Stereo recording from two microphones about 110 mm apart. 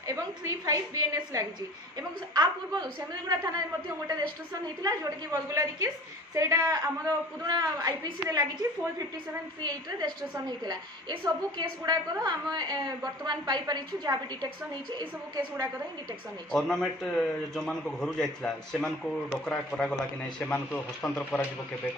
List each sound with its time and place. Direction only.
0.0 s a woman's voice: 30° right (ahead or behind)
4.8 s a woman's voice: 30° right (ahead or behind)
9.6 s a woman's voice: 40° right (ahead or behind)
16.5 s a man's voice: 5° left (ahead or behind)